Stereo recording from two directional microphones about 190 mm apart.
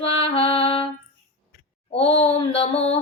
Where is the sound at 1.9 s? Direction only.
30° left (ahead or behind).